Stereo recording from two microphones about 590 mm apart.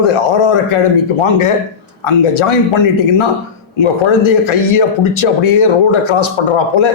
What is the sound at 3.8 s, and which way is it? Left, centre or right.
Speech, left.